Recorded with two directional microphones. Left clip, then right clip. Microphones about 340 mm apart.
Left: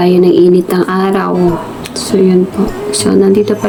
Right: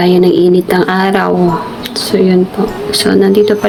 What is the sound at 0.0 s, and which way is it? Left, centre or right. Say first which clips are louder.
Speech: left 1 dB; centre.